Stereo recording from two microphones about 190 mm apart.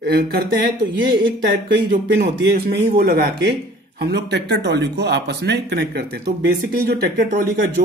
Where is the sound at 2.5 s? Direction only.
50° right (ahead or behind).